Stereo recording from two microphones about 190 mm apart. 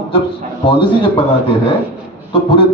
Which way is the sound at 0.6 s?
30° left (ahead or behind).